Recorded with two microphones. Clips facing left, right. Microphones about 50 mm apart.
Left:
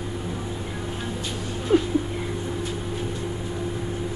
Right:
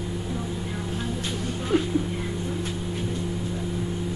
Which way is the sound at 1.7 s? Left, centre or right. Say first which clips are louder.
Left 4 dB; centre.